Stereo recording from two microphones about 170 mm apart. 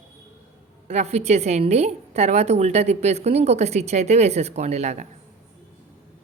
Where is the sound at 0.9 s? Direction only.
40° right (ahead or behind).